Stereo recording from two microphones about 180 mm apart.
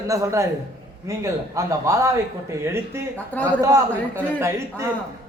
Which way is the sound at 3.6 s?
20° right (ahead or behind).